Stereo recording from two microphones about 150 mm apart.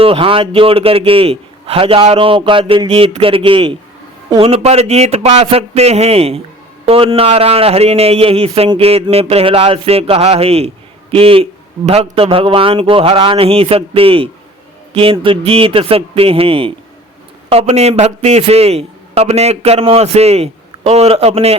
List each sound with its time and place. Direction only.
0.0 s a man's voice: 35° right (ahead or behind)